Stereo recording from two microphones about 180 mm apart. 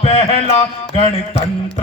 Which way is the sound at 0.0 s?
35° left (ahead or behind).